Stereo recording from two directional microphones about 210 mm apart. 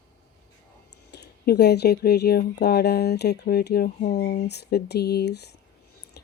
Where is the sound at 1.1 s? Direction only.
50° left (ahead or behind).